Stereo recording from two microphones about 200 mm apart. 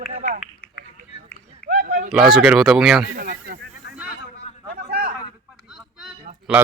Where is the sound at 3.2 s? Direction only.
45° right (ahead or behind).